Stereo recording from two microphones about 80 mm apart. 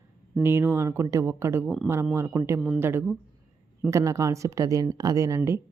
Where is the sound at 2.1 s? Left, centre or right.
Right.